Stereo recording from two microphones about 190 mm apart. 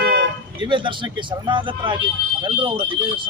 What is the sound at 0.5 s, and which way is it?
A man's voice, 25° right (ahead or behind).